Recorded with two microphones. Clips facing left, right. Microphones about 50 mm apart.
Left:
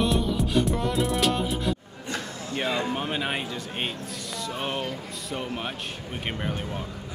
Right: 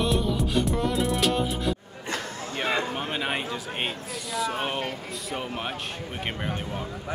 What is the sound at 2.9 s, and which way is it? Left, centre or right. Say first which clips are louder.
Speech: even; centre.